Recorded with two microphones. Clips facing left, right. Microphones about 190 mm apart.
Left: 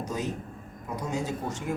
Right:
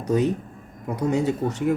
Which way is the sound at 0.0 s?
65° right (ahead or behind).